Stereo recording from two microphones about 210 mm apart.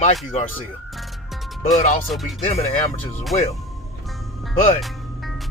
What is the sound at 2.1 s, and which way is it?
Speech, centre (ahead or behind).